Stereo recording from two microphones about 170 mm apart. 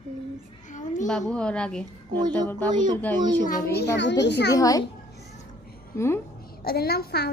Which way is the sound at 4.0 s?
90° left.